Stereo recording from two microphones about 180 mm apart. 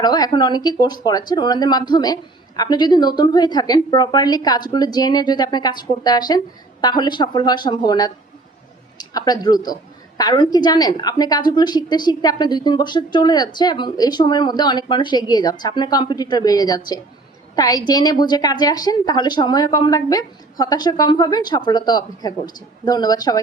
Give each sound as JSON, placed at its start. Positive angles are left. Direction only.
{"t": 0.0, "sound": "a woman's voice", "side_deg": 20}